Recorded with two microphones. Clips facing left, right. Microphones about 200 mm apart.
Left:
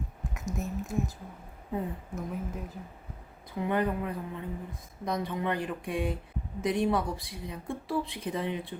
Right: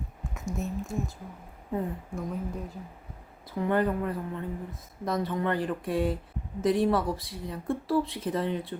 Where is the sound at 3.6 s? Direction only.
10° left (ahead or behind).